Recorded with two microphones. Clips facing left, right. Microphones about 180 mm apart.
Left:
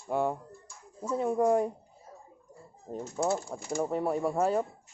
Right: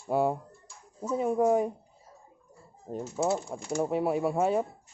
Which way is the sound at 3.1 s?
5° right (ahead or behind).